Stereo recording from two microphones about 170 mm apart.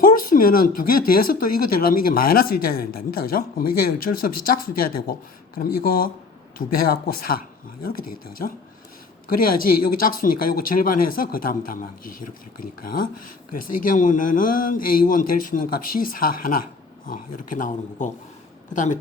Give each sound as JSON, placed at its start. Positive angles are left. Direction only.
{"t": 0.0, "sound": "speech", "side_deg": 55}